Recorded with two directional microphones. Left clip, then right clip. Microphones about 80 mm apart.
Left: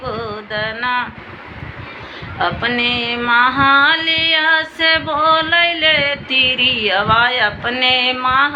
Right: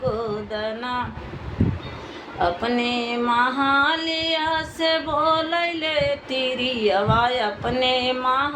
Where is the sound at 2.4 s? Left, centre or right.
Right.